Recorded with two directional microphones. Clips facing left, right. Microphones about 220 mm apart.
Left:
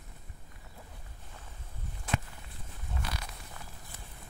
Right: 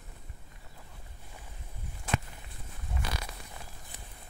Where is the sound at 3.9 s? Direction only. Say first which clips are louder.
Right 2 dB; 15° right (ahead or behind).